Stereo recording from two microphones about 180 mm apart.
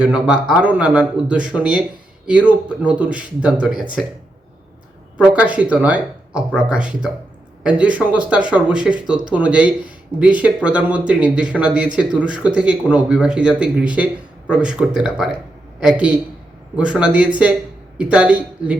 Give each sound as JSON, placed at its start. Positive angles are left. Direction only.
{"t": 0.0, "sound": "speech", "side_deg": -5}
{"t": 5.2, "sound": "speech", "side_deg": -10}